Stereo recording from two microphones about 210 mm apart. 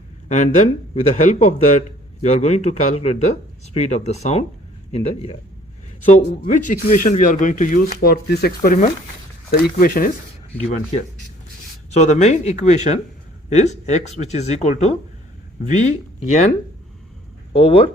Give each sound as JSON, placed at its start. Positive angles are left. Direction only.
{"t": 0.3, "sound": "speech", "side_deg": 35}
{"t": 11.9, "sound": "speech", "side_deg": 35}
{"t": 17.5, "sound": "speech", "side_deg": 25}